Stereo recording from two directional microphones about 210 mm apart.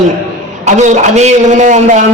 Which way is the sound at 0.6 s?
35° right (ahead or behind).